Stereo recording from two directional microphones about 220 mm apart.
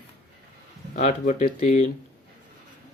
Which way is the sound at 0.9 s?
35° left (ahead or behind).